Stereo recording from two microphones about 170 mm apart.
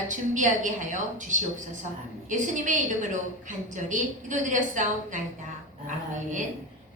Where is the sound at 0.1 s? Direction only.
50° right (ahead or behind).